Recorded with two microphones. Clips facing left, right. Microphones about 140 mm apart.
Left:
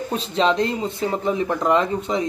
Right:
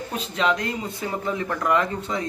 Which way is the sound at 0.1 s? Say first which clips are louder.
Left 4 dB; 30° left (ahead or behind).